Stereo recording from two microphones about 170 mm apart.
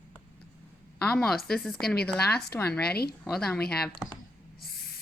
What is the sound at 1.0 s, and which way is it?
A woman's voice, 5° left (ahead or behind).